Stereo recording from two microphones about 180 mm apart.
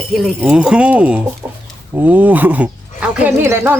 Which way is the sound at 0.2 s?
5° right (ahead or behind).